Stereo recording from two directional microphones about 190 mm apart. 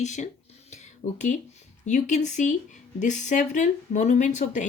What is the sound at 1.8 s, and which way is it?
Speech, 40° left (ahead or behind).